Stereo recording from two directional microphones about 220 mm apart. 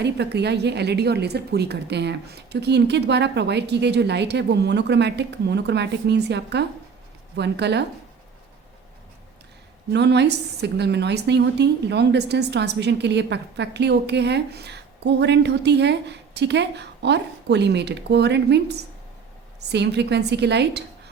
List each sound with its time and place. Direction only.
0.0 s a woman's voice: 50° right (ahead or behind)
9.9 s a woman's voice: 50° right (ahead or behind)